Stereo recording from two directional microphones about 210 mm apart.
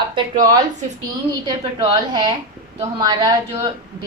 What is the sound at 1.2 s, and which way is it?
A woman's voice, 20° right (ahead or behind).